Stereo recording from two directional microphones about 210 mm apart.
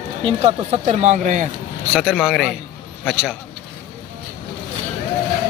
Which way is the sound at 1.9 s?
5° right (ahead or behind).